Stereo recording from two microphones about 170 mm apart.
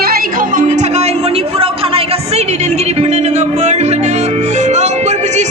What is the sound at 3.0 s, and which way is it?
Music, 40° right (ahead or behind).